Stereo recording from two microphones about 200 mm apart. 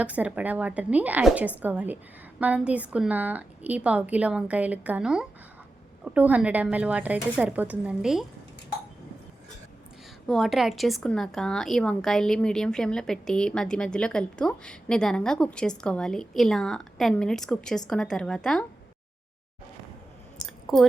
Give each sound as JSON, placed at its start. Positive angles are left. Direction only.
{"t": 0.0, "sound": "a woman's voice", "side_deg": -5}
{"t": 10.2, "sound": "speech", "side_deg": 0}
{"t": 20.4, "sound": "a sound", "side_deg": 0}